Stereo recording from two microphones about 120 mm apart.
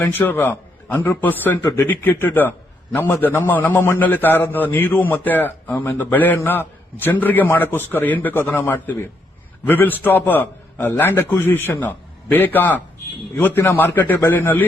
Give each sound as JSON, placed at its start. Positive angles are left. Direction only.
{"t": 0.0, "sound": "a man's voice", "side_deg": 15}